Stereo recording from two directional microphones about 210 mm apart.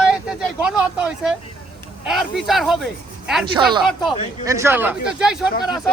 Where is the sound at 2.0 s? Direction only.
Centre (ahead or behind).